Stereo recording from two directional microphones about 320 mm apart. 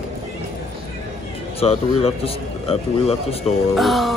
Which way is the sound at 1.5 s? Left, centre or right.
Centre.